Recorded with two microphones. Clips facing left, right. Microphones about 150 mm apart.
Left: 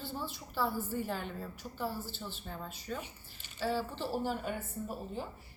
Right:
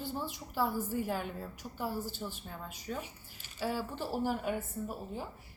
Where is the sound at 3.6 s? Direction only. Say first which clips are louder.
Left 1 dB; 10° right (ahead or behind).